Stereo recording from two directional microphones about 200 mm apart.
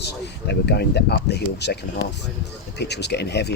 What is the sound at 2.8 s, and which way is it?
Speech, 55° left (ahead or behind).